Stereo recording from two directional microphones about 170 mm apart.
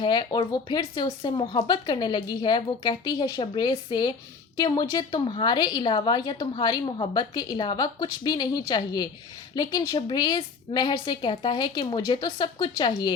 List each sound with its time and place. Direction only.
0.0 s a woman's voice: 25° left (ahead or behind)